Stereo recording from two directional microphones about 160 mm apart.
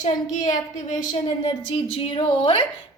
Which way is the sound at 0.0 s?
50° left (ahead or behind).